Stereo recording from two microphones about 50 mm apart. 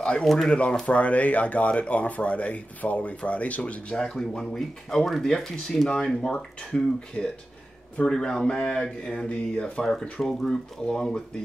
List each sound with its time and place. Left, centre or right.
0.0 s speech: centre
3.9 s speech: centre
6.7 s speech: centre
8.1 s speech: centre